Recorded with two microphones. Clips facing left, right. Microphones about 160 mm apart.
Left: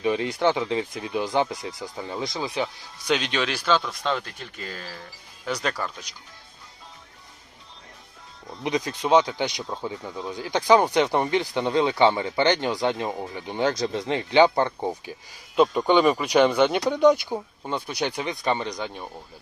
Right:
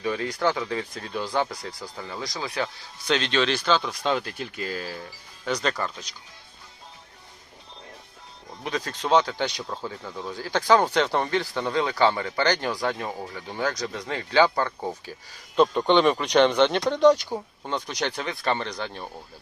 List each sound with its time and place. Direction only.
0.0 s speech: 20° left (ahead or behind); by 4.9 s 5° right (ahead or behind)
5.5 s speech: 5° left (ahead or behind)
8.6 s speech: 15° left (ahead or behind)
15.5 s speech: 5° left (ahead or behind)